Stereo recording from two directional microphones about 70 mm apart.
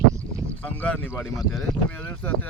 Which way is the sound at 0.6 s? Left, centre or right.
Centre.